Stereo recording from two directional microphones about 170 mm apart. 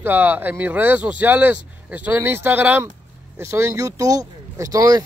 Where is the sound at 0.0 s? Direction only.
10° right (ahead or behind).